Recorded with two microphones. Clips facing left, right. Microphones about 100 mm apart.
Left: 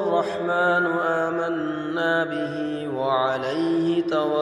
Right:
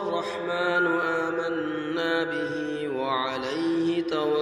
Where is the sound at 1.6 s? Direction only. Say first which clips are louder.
Left 2 dB; 30° left (ahead or behind).